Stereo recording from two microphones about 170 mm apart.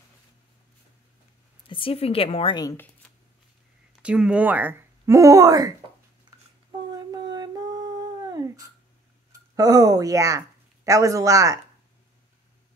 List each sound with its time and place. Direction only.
1.7 s a woman's voice: 30° left (ahead or behind)
4.0 s speech: 5° right (ahead or behind)
6.9 s a sound: 25° right (ahead or behind)
9.6 s speech: 20° right (ahead or behind)